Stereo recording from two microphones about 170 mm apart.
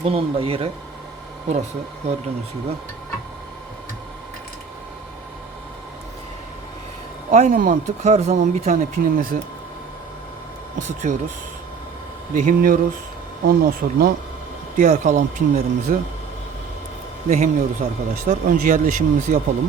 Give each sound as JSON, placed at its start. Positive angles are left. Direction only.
{"t": 0.0, "sound": "speech", "side_deg": -35}
{"t": 2.0, "sound": "speech", "side_deg": -40}
{"t": 7.3, "sound": "speech", "side_deg": -45}
{"t": 11.1, "sound": "speech", "side_deg": -50}
{"t": 12.3, "sound": "speech", "side_deg": -55}
{"t": 14.8, "sound": "speech", "side_deg": -45}
{"t": 17.2, "sound": "speech", "side_deg": -45}